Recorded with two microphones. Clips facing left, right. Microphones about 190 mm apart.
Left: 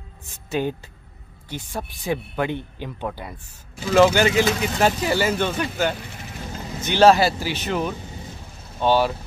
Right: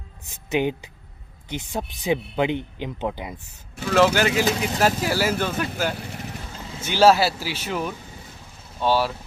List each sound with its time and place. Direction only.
0.3 s speech: 15° right (ahead or behind)
3.9 s speech: centre (ahead or behind)